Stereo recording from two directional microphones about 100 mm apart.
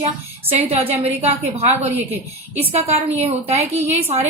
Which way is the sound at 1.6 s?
90° right.